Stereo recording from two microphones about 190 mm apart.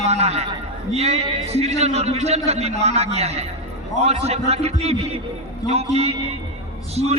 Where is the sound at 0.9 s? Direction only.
35° right (ahead or behind).